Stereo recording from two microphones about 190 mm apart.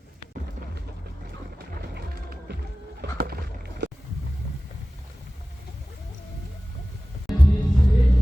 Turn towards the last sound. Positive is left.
turn(degrees=0)  # may be behind; listen again after turning